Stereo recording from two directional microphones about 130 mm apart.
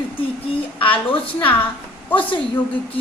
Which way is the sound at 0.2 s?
45° left (ahead or behind).